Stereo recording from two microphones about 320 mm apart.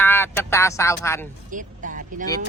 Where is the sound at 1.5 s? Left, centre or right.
Right.